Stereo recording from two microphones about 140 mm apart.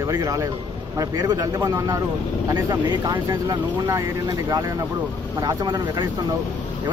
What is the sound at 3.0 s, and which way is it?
Speech, 25° right (ahead or behind).